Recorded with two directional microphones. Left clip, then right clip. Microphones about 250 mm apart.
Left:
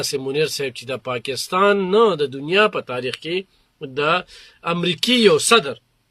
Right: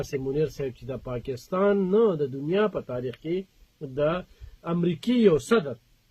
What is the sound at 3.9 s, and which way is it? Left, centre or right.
Speech, centre.